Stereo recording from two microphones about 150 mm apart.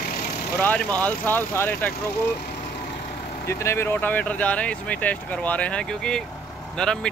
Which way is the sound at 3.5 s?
15° left (ahead or behind).